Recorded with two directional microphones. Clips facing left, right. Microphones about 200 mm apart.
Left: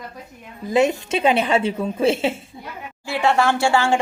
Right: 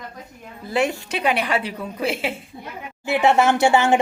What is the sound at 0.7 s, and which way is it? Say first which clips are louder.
A woman's voice: left 4 dB; 20° left (ahead or behind).